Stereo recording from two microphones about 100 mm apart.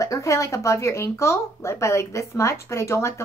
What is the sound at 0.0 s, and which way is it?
A woman's voice, 30° left (ahead or behind).